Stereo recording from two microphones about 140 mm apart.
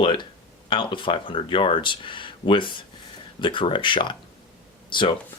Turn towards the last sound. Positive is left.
turn(degrees=35)  # may be behind; listen again after turning